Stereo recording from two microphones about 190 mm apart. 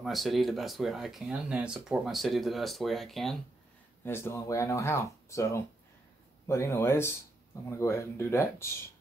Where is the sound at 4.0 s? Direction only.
10° left (ahead or behind).